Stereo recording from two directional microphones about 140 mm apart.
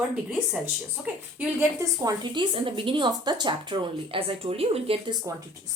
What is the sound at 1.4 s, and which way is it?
A woman's voice, 20° right (ahead or behind).